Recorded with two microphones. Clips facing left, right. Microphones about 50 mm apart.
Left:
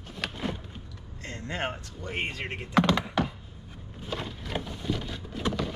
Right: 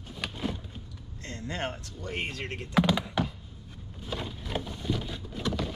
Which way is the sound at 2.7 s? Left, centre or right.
Centre.